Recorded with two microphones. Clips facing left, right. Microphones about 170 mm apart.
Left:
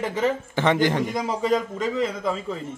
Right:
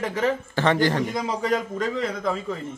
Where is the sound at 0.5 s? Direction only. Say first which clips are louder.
Even; 20° left (ahead or behind).